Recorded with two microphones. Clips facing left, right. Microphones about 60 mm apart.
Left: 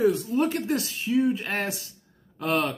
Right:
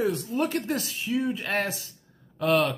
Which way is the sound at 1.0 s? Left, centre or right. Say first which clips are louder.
Left 4 dB; left.